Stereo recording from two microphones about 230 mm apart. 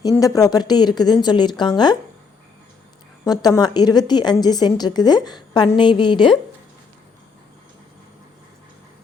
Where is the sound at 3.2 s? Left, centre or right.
Centre.